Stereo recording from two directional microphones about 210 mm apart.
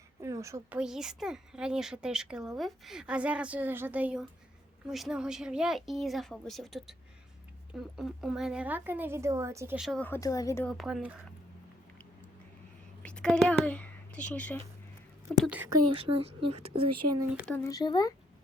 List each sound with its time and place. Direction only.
0.2 s speech: 15° right (ahead or behind); by 10.7 s 15° left (ahead or behind)
10.7 s speech: centre (ahead or behind)
13.0 s a woman's voice: 5° left (ahead or behind)
15.3 s speech: 5° right (ahead or behind)
16.0 s speech: 25° right (ahead or behind)
17.5 s speech: 15° left (ahead or behind)